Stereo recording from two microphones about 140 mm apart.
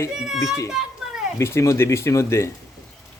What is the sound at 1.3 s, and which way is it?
Speech, 20° left (ahead or behind).